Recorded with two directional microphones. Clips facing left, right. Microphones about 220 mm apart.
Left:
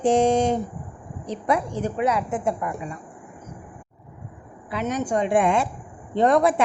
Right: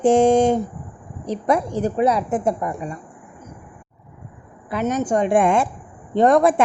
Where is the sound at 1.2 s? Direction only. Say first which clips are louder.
Right 4 dB; 40° right (ahead or behind).